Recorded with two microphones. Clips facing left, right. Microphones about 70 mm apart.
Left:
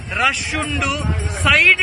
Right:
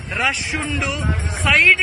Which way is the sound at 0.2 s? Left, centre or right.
Right.